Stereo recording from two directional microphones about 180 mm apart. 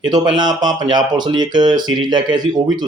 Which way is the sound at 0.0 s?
25° right (ahead or behind).